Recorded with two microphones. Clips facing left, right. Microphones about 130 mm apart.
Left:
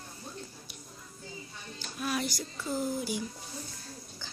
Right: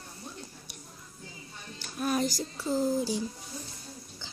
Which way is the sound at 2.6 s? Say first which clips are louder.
Right 5 dB; 25° right (ahead or behind).